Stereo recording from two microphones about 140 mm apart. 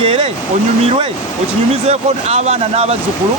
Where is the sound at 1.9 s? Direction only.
50° right (ahead or behind).